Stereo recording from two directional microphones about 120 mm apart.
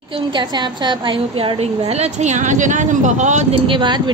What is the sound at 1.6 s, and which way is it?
Speech, 75° right (ahead or behind).